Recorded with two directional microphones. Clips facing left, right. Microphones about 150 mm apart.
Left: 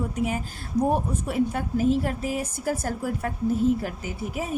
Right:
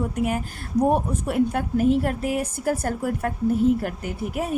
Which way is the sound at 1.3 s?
60° right (ahead or behind).